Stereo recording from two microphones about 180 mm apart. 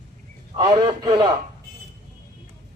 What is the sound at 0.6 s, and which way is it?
Speech, 20° right (ahead or behind).